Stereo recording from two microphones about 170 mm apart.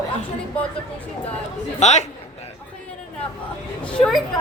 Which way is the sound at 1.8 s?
40° left (ahead or behind).